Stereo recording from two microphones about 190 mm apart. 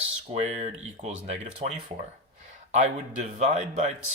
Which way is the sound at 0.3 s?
35° right (ahead or behind).